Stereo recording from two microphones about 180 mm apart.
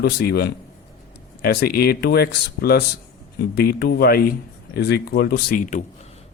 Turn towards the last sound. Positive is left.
turn(degrees=45)  # may be behind; listen again after turning